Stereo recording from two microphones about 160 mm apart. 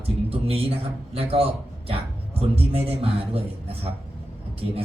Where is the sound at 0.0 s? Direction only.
35° right (ahead or behind).